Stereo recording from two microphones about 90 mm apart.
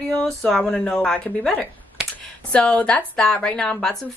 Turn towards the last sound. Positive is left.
turn(degrees=10)  # may be behind; listen again after turning